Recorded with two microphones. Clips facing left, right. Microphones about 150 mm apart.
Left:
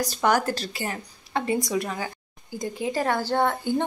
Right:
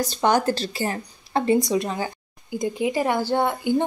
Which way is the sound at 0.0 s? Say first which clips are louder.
Right 2 dB; 25° right (ahead or behind).